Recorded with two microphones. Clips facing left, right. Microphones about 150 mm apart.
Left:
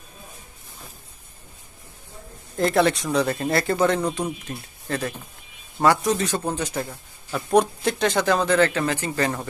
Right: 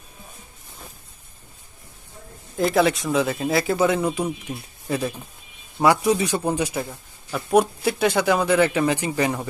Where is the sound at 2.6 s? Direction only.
5° right (ahead or behind).